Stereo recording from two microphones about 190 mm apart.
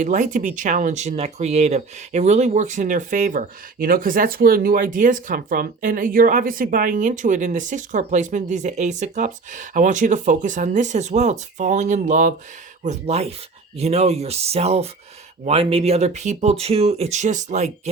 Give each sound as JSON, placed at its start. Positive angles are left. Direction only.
{"t": 0.0, "sound": "speech", "side_deg": -40}